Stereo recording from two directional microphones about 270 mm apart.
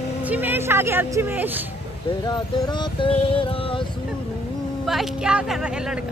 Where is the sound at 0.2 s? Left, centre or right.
Centre.